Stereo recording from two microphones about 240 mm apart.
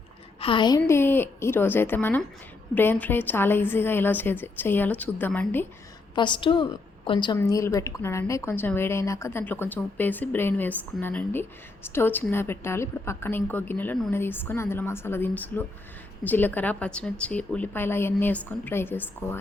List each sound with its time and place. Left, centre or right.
0.3 s a woman's voice: left
6.1 s a woman's voice: centre